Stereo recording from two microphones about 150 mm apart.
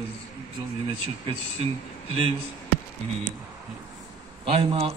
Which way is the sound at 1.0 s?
40° right (ahead or behind).